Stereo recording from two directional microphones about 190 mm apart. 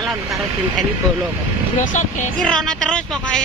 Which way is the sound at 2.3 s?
5° left (ahead or behind).